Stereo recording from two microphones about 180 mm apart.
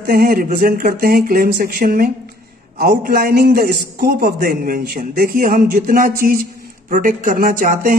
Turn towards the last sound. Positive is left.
turn(degrees=-50)  # may be behind; listen again after turning